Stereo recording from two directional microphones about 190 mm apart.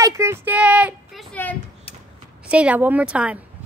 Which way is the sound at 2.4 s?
5° right (ahead or behind).